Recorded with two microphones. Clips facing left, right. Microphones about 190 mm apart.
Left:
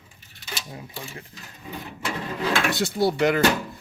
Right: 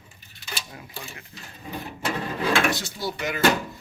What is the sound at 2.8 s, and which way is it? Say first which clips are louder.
Speech: left 10 dB; 60° left (ahead or behind).